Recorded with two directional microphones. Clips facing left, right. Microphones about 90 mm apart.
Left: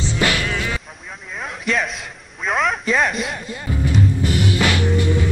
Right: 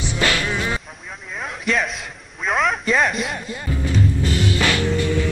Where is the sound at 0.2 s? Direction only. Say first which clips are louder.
Even; 20° left (ahead or behind).